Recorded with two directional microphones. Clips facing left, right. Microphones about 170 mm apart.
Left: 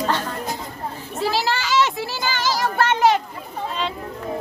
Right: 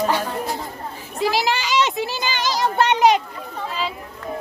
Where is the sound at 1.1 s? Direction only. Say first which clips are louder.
Right 2 dB; 15° right (ahead or behind).